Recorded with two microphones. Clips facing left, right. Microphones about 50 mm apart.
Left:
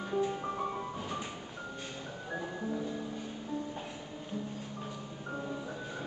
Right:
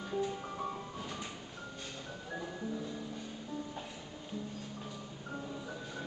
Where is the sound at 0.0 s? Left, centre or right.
Centre.